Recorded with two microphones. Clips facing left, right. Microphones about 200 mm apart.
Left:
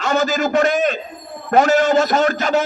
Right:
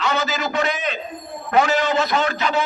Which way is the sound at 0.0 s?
45° left (ahead or behind).